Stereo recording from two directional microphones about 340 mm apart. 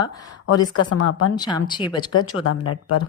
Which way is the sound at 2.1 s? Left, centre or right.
Left.